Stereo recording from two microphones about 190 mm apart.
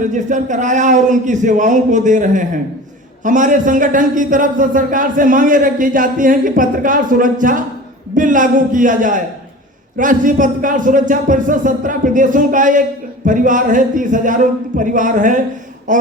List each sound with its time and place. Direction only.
0.0 s a man's voice: 40° right (ahead or behind)